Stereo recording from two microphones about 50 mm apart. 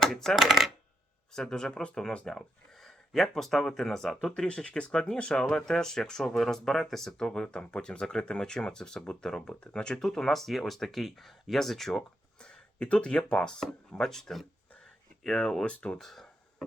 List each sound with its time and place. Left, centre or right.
0.0 s speech: centre
0.4 s coin: centre
1.3 s speech: centre
2.2 s speech: centre
4.4 s speech: centre
12.4 s speech: centre
15.6 s speech: left
16.0 s a sound: centre